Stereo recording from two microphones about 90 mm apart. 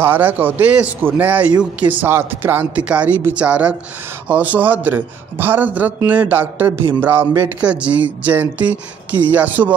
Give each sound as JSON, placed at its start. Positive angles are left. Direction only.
{"t": 0.0, "sound": "a man's voice", "side_deg": -20}